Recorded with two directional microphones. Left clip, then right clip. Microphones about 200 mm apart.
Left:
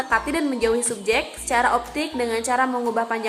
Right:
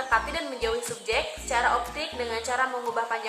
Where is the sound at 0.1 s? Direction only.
45° left (ahead or behind).